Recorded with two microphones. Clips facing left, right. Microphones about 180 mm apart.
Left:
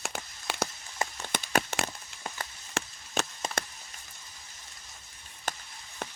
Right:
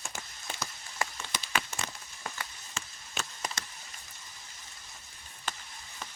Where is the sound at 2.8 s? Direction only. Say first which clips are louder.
Left 9 dB; 80° left.